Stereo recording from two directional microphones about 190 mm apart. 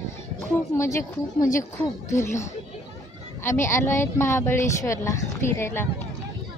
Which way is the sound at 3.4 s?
15° left (ahead or behind).